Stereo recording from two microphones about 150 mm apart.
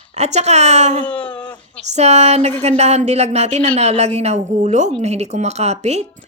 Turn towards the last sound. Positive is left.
turn(degrees=-45)  # may be behind; listen again after turning